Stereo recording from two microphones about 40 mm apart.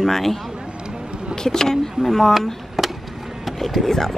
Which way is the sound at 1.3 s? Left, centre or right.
Centre.